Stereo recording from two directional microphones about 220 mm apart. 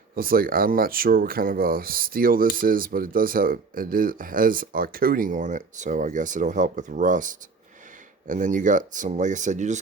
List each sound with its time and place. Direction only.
0.2 s speech: 40° right (ahead or behind)